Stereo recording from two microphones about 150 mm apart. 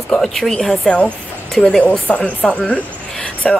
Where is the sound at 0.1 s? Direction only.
Centre (ahead or behind).